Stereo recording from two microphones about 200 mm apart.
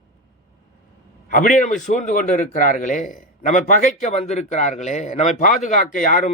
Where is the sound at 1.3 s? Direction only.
40° left (ahead or behind).